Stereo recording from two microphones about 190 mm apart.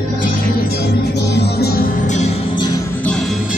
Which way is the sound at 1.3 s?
60° left (ahead or behind).